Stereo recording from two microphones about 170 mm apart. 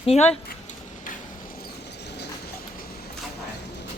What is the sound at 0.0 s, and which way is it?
Speech, 40° left (ahead or behind).